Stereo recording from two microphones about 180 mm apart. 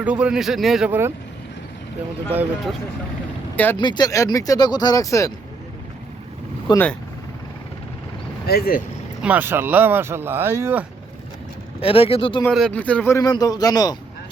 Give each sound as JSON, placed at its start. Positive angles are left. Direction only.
{"t": 0.0, "sound": "speech", "side_deg": -5}
{"t": 3.5, "sound": "speech", "side_deg": 10}
{"t": 3.8, "sound": "speech", "side_deg": 25}
{"t": 6.7, "sound": "speech", "side_deg": 25}
{"t": 8.4, "sound": "speech", "side_deg": 60}
{"t": 9.2, "sound": "speech", "side_deg": -10}
{"t": 11.8, "sound": "speech", "side_deg": 30}
{"t": 12.5, "sound": "speech", "side_deg": 5}